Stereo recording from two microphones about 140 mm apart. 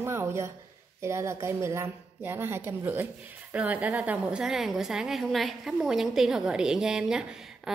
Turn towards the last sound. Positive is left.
turn(degrees=-5)  # may be behind; listen again after turning